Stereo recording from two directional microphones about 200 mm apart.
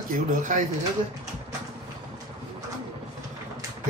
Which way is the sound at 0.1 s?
40° right (ahead or behind).